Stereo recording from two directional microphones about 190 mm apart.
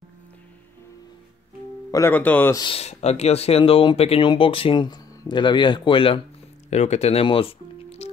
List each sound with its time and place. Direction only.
1.9 s speech: 15° left (ahead or behind)
2.6 s speech: 30° left (ahead or behind)